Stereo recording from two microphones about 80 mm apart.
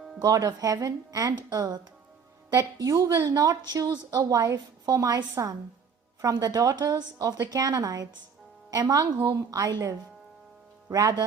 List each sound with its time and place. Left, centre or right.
0.2 s a woman's voice: right
6.3 s a woman's voice: right